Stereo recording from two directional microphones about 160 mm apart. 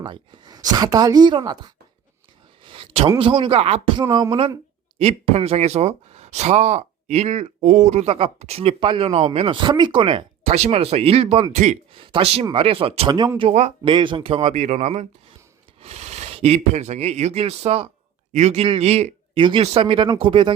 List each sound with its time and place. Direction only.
0.0 s a woman's voice: 30° right (ahead or behind)
2.6 s a sound: 35° right (ahead or behind)
3.2 s a woman's voice: 30° right (ahead or behind); by 11.8 s 45° right (ahead or behind)
11.9 s speech: 30° right (ahead or behind)
13.5 s speech: 45° right (ahead or behind)
13.9 s speech: 30° right (ahead or behind)